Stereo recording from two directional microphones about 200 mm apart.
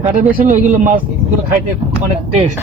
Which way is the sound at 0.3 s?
45° right (ahead or behind).